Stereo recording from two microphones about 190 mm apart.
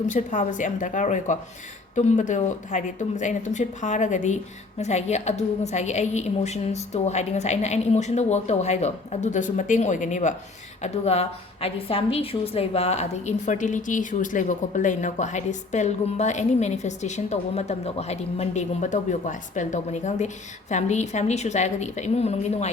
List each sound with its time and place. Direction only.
0.1 s a woman's voice: 40° left (ahead or behind)